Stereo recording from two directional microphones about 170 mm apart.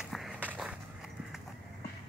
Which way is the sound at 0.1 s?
5° right (ahead or behind).